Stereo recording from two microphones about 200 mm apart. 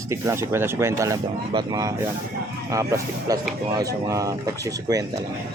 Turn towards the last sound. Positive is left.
turn(degrees=-15)  # may be behind; listen again after turning